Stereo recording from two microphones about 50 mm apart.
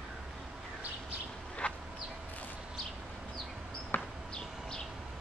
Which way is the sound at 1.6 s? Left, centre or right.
Left.